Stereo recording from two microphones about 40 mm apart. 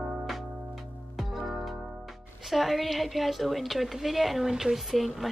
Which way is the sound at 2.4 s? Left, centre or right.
Centre.